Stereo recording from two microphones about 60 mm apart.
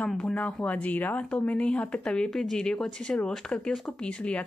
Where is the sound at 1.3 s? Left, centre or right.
Centre.